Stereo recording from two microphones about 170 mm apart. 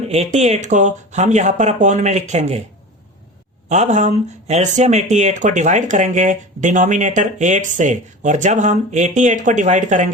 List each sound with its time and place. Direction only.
0.1 s speech: 40° right (ahead or behind)
3.7 s speech: 45° right (ahead or behind)